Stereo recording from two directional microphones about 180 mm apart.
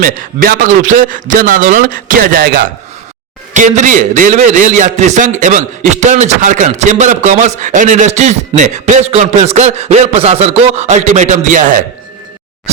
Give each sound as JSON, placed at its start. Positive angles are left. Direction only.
{"t": 0.0, "sound": "a man's voice", "side_deg": -50}
{"t": 3.5, "sound": "a man's voice", "side_deg": -40}